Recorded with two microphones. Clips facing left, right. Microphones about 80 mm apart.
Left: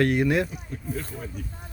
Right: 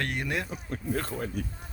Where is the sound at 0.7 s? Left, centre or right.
Right.